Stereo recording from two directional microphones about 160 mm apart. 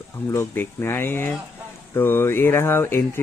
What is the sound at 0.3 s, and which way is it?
Speech, 15° left (ahead or behind).